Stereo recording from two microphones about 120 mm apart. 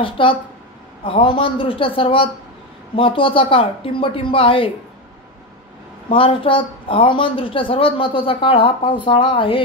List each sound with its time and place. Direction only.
0.0 s speech: 45° left (ahead or behind)
6.0 s speech: 50° left (ahead or behind)